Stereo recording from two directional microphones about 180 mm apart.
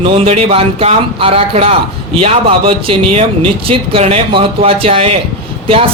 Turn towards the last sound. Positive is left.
turn(degrees=-30)  # may be behind; listen again after turning